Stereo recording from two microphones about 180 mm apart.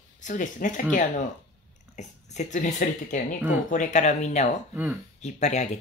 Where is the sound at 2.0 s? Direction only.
40° left (ahead or behind).